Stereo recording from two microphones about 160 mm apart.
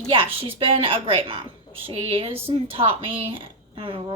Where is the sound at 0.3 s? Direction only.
35° right (ahead or behind).